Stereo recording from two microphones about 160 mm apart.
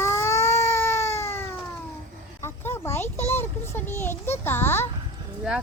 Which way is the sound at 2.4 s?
15° left (ahead or behind).